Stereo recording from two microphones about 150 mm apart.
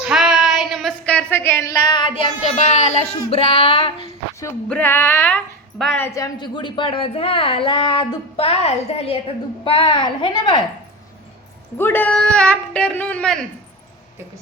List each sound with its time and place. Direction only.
0.0 s a sound: 5° right (ahead or behind); by 4.1 s 35° left (ahead or behind)
4.7 s a woman's voice: 15° left (ahead or behind); by 10.6 s 30° left (ahead or behind)
11.8 s speech: 15° left (ahead or behind)